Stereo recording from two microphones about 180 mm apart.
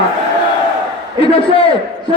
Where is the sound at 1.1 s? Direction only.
30° left (ahead or behind).